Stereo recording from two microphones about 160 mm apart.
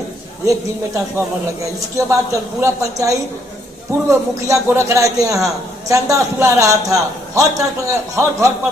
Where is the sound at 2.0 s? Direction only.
20° right (ahead or behind).